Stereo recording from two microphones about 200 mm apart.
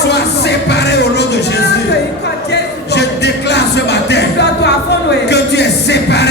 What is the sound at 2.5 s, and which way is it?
Music, 55° left (ahead or behind).